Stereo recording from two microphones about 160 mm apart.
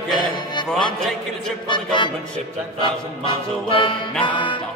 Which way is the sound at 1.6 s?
30° left (ahead or behind).